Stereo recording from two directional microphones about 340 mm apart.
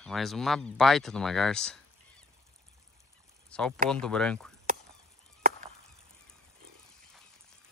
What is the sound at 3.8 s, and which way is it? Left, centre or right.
Speech, centre.